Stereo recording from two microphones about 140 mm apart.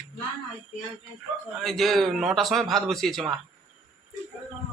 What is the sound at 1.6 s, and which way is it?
A man's voice, centre (ahead or behind).